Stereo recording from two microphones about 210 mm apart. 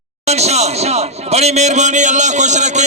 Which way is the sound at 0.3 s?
30° right (ahead or behind).